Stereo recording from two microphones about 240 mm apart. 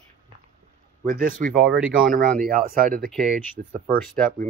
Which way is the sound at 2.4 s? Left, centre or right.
Right.